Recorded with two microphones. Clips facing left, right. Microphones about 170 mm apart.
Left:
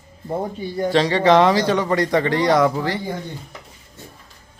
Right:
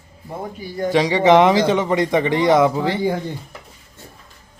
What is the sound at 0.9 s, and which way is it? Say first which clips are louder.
Speech: right 2 dB; 15° right (ahead or behind).